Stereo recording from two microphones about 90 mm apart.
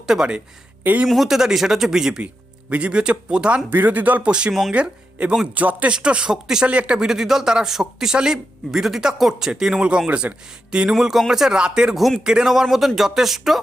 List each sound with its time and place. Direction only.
0.0 s speech: 5° right (ahead or behind)